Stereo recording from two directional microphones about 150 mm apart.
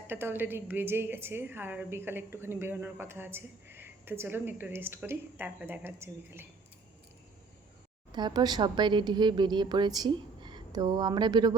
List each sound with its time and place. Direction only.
0.1 s a woman's voice: 15° right (ahead or behind)
8.1 s a woman's voice: 30° right (ahead or behind)